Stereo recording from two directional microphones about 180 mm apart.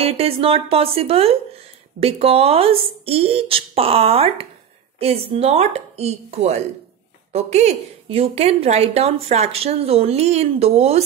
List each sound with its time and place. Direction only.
0.0 s a woman's voice: 30° right (ahead or behind)